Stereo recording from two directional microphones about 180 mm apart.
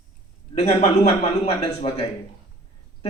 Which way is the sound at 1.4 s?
35° left (ahead or behind).